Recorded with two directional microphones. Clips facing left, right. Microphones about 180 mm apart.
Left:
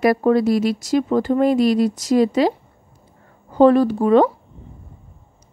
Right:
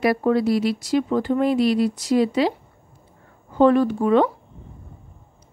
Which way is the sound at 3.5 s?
35° left (ahead or behind).